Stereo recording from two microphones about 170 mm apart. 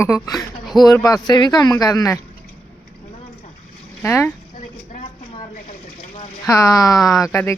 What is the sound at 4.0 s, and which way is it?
Speech, 15° left (ahead or behind).